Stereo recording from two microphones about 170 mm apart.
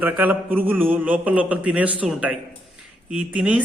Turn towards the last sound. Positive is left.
turn(degrees=-5)  # may be behind; listen again after turning